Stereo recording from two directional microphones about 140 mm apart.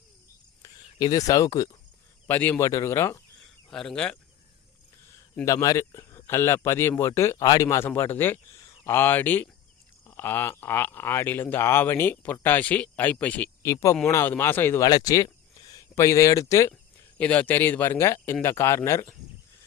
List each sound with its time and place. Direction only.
0.6 s speech: 25° left (ahead or behind)
2.2 s speech: 15° left (ahead or behind)
3.7 s speech: 5° left (ahead or behind)
5.5 s speech: 20° left (ahead or behind)
13.7 s speech: 20° left (ahead or behind)
14.8 s speech: 25° left (ahead or behind)
17.2 s speech: 10° left (ahead or behind)